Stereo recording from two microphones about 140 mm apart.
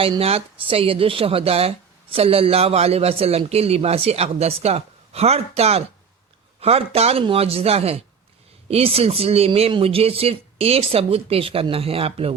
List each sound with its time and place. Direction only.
0.2 s speech: 45° right (ahead or behind)